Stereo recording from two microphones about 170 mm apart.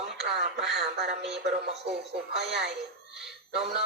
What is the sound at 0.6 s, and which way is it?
Speech, 90° right.